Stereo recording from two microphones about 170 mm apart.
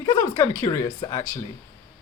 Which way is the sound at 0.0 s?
20° left (ahead or behind).